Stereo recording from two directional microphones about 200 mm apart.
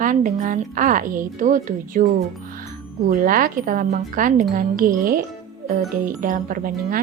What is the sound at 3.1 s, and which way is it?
Speech, 45° right (ahead or behind).